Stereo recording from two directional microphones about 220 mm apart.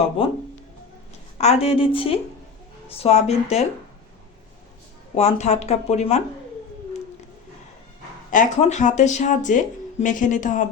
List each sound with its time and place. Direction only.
1.4 s a woman's voice: 30° left (ahead or behind)
5.1 s speech: 30° left (ahead or behind)
8.3 s speech: 35° left (ahead or behind)